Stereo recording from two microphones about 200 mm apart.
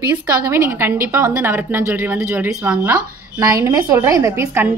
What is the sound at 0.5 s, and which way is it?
A woman's voice, 10° right (ahead or behind).